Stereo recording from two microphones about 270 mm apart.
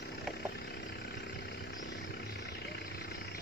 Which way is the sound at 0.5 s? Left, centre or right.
Left.